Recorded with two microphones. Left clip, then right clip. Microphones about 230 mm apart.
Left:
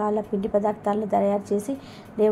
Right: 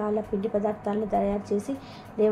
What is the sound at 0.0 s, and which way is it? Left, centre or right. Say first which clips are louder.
A woman's voice: left 3 dB; left.